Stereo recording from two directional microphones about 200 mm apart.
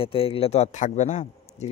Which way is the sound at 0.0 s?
25° left (ahead or behind).